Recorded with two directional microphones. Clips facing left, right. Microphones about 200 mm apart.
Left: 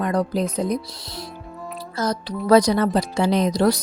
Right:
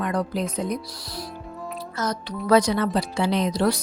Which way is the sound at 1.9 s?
35° left (ahead or behind).